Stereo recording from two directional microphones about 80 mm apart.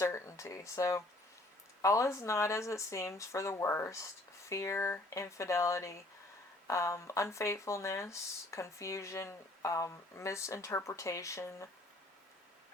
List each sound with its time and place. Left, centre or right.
0.0 s speech: left